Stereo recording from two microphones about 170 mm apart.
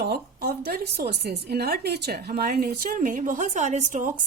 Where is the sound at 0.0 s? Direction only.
70° right (ahead or behind).